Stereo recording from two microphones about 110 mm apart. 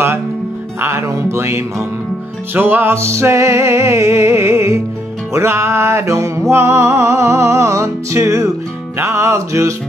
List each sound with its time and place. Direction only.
0.7 s music: 25° right (ahead or behind)